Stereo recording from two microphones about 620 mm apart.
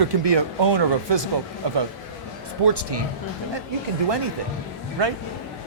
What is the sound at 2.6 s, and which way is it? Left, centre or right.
Speech, right.